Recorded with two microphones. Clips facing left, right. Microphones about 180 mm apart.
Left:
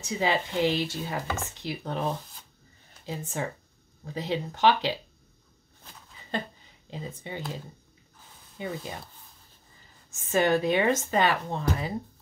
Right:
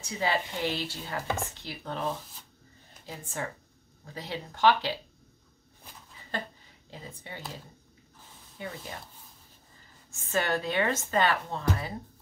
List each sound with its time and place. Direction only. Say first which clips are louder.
0.0 s speech: left 3 dB; 20° left (ahead or behind)
1.2 s chopping: right 1 dB; 20° right (ahead or behind)
1.6 s speech: left 4 dB; 15° left (ahead or behind)
3.4 s speech: left 3 dB; 20° left (ahead or behind)
6.9 s speech: left 6 dB; 20° left (ahead or behind)
8.5 s speech: left 5 dB; 20° left (ahead or behind)
10.3 s speech: left 5 dB; 15° left (ahead or behind)